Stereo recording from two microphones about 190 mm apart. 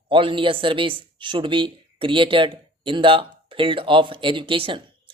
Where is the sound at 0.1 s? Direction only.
25° right (ahead or behind).